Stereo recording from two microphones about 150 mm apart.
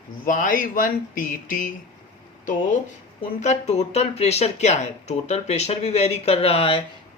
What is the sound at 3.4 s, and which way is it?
Speech, 50° left (ahead or behind).